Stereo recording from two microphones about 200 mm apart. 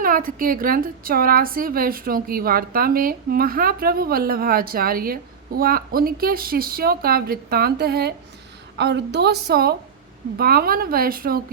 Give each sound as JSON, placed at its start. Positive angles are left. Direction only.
{"t": 0.0, "sound": "a woman's voice", "side_deg": -45}